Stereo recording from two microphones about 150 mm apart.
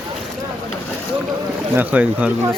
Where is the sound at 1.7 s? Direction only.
10° right (ahead or behind).